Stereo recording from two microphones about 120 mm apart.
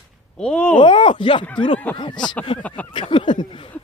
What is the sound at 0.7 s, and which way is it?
Speech, 40° left (ahead or behind).